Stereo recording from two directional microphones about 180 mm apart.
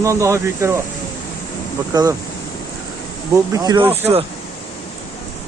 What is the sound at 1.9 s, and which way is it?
Speech, 20° right (ahead or behind).